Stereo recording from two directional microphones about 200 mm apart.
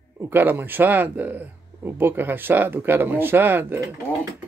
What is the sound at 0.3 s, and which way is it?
Speech, 10° right (ahead or behind).